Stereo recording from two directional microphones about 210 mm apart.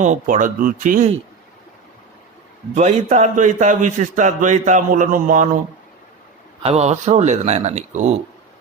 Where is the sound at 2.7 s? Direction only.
35° right (ahead or behind).